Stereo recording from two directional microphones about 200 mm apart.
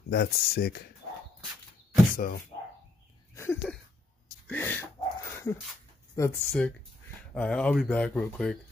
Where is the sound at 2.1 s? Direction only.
45° left (ahead or behind).